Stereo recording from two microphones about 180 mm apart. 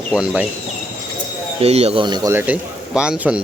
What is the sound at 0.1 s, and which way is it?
Speech, 5° right (ahead or behind).